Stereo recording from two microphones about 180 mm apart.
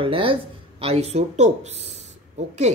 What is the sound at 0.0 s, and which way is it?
Speech, 30° right (ahead or behind).